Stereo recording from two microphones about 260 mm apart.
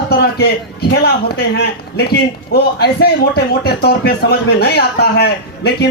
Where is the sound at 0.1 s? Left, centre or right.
Left.